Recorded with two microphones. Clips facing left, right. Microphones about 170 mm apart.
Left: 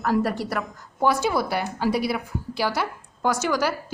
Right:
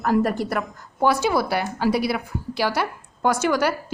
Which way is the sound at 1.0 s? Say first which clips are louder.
Right 2 dB; 75° right (ahead or behind).